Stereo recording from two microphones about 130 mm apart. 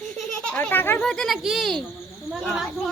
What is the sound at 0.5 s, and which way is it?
Speech, 10° left (ahead or behind).